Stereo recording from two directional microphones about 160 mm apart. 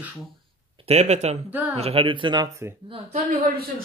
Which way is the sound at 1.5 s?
10° right (ahead or behind).